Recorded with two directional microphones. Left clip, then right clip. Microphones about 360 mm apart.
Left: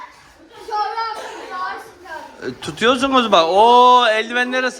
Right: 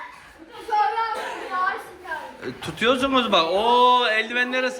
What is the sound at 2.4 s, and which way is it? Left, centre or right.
A man's voice, centre.